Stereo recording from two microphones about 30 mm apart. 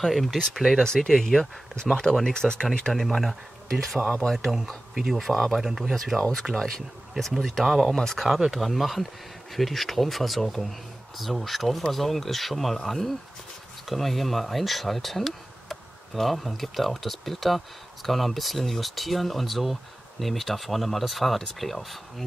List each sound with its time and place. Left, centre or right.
0.0 s speech: centre
0.6 s speech: centre
0.9 s speech: centre
2.9 s speech: centre
4.9 s speech: centre
5.2 s speech: centre
5.6 s speech: centre
6.5 s speech: centre
7.9 s speech: centre
8.5 s speech: centre